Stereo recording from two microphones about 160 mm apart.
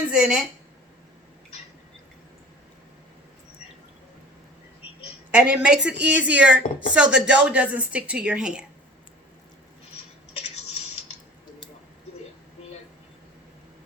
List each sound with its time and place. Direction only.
0.1 s a woman's voice: 5° right (ahead or behind)
5.3 s speech: 5° right (ahead or behind)